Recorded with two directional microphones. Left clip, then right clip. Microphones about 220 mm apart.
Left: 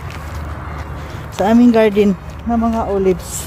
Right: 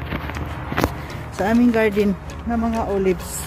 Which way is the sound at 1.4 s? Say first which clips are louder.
Left 6 dB; 20° left (ahead or behind).